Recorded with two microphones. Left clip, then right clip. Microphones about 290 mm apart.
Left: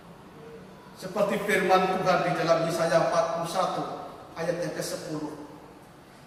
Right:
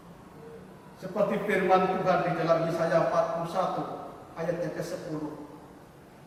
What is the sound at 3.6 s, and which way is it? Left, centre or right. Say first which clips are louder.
Speech: left 1 dB; centre.